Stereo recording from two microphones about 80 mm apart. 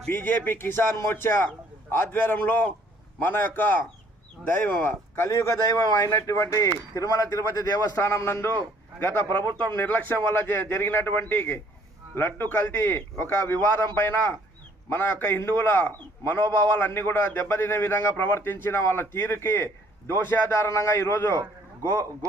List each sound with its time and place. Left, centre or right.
0.1 s a man's voice: left
7.9 s a man's voice: left